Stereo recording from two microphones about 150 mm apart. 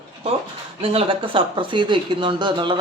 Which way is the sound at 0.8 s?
35° right (ahead or behind).